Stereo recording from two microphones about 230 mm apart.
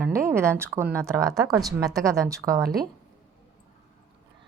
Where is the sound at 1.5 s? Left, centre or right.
Centre.